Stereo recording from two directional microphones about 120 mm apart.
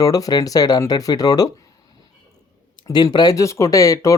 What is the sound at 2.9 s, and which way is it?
Speech, 30° left (ahead or behind).